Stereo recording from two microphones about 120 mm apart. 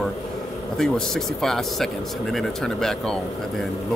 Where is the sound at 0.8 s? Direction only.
5° left (ahead or behind).